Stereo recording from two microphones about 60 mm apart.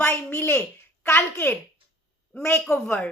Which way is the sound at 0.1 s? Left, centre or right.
Left.